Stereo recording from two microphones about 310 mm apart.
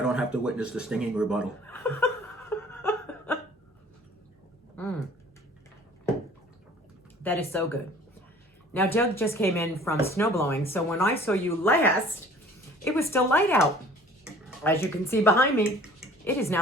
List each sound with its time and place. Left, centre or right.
0.0 s speech: centre
2.5 s a sound: centre
7.2 s speech: centre